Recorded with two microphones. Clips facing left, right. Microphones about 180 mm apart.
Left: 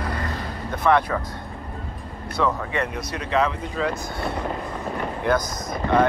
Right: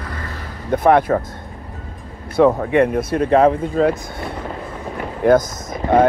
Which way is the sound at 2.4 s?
50° right (ahead or behind).